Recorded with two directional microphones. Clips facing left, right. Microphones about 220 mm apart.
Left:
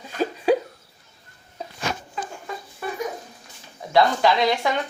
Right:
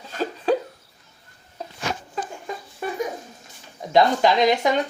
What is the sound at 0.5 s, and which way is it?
Hiccup, 10° left (ahead or behind).